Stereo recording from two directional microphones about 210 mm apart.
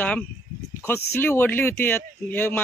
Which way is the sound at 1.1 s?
10° left (ahead or behind).